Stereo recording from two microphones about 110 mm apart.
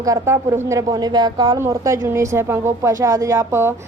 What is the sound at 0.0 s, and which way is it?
Speech, 25° right (ahead or behind).